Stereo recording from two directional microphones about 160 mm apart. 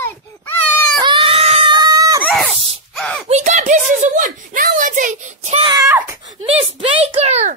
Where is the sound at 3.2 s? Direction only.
45° right (ahead or behind).